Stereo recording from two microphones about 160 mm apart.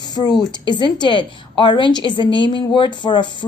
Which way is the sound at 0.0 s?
25° left (ahead or behind).